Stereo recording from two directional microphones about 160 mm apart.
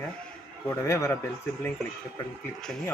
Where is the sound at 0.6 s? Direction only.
15° left (ahead or behind).